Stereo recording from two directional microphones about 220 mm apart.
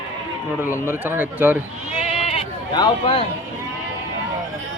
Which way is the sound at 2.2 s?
20° left (ahead or behind).